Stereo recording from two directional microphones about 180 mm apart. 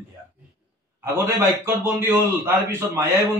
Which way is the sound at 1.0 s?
15° right (ahead or behind).